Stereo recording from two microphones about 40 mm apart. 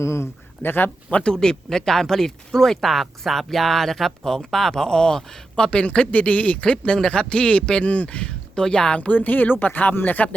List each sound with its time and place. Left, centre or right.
0.6 s speech: left
1.2 s speech: centre
7.9 s speech: left
8.5 s speech: centre
9.0 s speech: left